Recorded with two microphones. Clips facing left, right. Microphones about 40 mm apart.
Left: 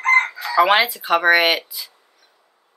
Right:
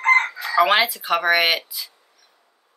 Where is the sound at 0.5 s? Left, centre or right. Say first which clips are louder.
Left 2 dB; centre.